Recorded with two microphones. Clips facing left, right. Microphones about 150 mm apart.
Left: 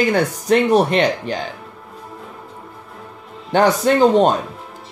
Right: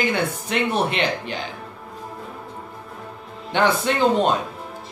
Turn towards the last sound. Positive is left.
turn(degrees=40)  # may be behind; listen again after turning